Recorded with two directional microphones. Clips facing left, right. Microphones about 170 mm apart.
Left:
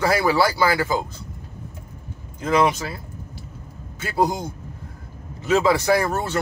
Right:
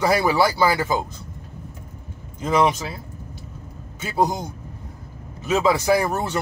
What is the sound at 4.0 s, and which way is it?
Speech, 20° right (ahead or behind).